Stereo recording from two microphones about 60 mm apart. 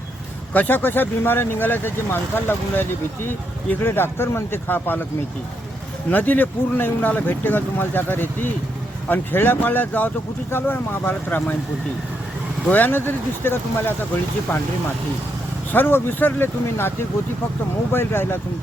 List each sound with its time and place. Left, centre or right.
0.5 s speech: left
6.1 s a man's voice: left
12.6 s speech: left
15.7 s speech: left
17.9 s speech: left